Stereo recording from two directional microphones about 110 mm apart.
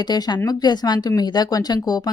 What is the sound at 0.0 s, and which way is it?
Speech, 40° left (ahead or behind).